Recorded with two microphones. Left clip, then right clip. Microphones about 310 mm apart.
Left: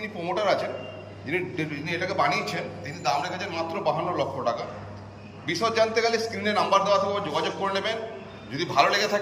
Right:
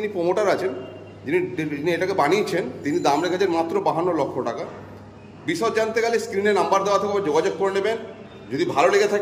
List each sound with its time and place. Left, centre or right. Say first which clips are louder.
0.0 s a man's voice: right 5 dB; centre